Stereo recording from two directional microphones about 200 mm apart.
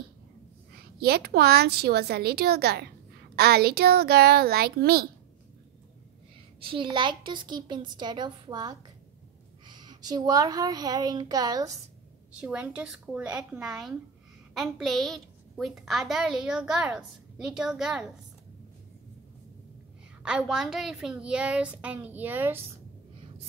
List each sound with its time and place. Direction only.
0.7 s a woman's voice: 50° right (ahead or behind)
6.6 s a woman's voice: 25° right (ahead or behind)
12.4 s a woman's voice: 5° right (ahead or behind)
20.2 s a woman's voice: 5° right (ahead or behind)